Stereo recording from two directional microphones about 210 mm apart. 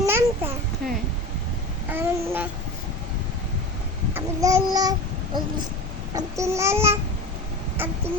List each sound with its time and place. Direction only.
0.0 s a sound: 10° right (ahead or behind)
1.9 s babbling: 10° right (ahead or behind)
4.1 s a child's voice: 15° right (ahead or behind)
6.1 s babbling: 15° right (ahead or behind)